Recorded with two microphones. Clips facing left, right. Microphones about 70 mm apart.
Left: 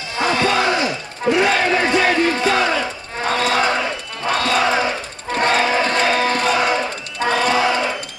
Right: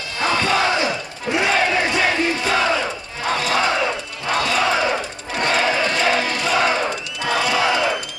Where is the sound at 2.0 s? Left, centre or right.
Left.